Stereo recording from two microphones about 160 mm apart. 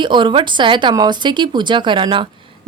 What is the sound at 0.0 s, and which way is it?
Speech, 30° right (ahead or behind).